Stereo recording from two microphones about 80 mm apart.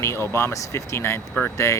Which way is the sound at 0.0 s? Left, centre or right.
Left.